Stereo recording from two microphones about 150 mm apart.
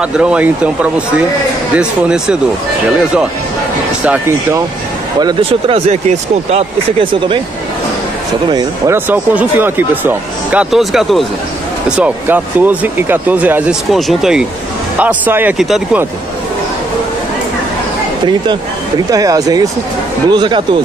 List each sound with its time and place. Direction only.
0.0 s speech: 5° right (ahead or behind)
1.8 s speech: 5° right (ahead or behind)
4.0 s speech: 10° right (ahead or behind)
5.2 s speech: 35° right (ahead or behind)
8.5 s speech: 30° right (ahead or behind)
8.9 s speech: 10° right (ahead or behind)
19.0 s speech: 25° right (ahead or behind)